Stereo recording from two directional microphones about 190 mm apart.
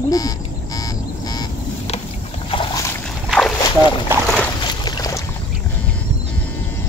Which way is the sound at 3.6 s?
25° left (ahead or behind).